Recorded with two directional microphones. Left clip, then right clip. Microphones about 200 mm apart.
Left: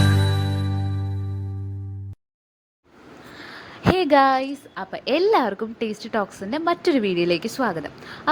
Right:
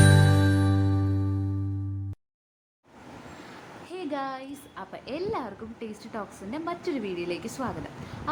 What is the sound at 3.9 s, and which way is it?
A woman's voice, 40° left (ahead or behind).